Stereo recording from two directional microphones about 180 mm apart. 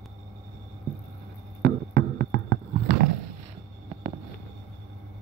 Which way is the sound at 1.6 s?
60° right (ahead or behind).